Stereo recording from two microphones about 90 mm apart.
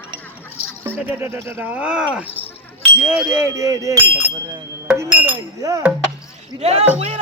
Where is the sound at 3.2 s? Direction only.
30° right (ahead or behind).